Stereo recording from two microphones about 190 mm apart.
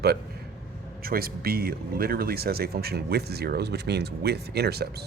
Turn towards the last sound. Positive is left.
turn(degrees=-55)  # may be behind; listen again after turning